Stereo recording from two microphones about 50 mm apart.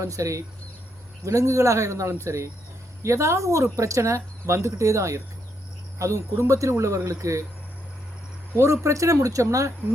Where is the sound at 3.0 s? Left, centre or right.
Right.